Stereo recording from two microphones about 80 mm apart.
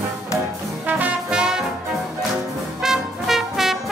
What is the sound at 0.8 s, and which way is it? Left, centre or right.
Music, centre.